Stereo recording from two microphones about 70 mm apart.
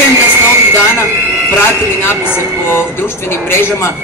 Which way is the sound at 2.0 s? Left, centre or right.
Left.